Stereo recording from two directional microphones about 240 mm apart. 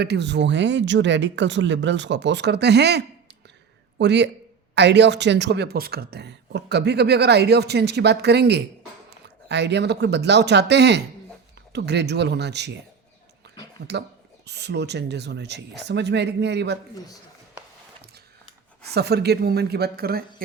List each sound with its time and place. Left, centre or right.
0.0 s a man's voice: right
14.4 s speech: right
18.9 s speech: right